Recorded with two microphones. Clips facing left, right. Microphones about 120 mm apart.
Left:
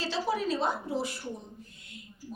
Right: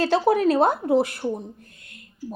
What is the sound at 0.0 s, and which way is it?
Speech, 55° right (ahead or behind).